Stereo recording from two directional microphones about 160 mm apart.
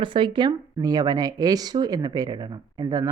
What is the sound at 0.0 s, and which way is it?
Speech, 30° right (ahead or behind).